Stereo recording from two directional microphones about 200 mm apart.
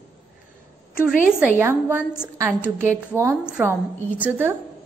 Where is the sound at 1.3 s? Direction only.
5° right (ahead or behind).